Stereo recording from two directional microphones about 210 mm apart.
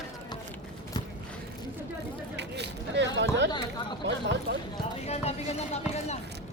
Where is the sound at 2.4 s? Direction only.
55° right (ahead or behind).